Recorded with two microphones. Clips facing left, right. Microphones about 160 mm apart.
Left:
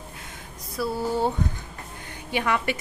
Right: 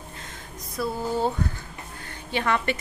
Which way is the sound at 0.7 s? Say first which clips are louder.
Left 1 dB; 10° left (ahead or behind).